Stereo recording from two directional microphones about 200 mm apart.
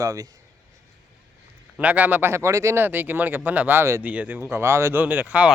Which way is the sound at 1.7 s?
5° right (ahead or behind).